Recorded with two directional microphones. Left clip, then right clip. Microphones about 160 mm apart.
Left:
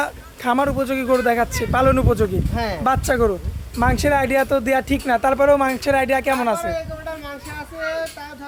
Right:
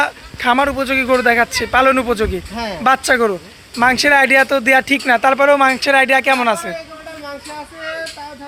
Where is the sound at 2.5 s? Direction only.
30° left (ahead or behind).